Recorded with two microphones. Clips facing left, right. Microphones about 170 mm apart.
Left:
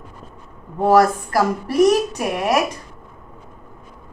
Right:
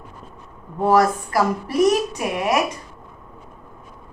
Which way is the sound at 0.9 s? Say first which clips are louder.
Left 2 dB; 35° left (ahead or behind).